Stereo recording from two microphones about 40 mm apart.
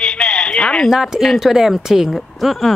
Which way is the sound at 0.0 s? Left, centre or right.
Centre.